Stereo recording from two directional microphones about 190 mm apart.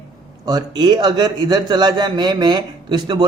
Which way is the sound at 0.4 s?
20° right (ahead or behind).